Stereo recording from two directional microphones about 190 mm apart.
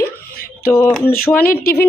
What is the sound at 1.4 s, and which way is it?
Speech, 50° left (ahead or behind).